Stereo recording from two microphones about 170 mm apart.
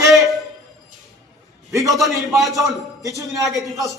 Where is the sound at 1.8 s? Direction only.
Centre (ahead or behind).